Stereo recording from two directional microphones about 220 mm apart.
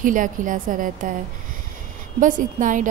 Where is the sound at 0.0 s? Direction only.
35° right (ahead or behind).